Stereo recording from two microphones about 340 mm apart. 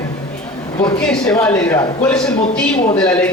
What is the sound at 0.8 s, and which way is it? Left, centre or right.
A man's voice, centre.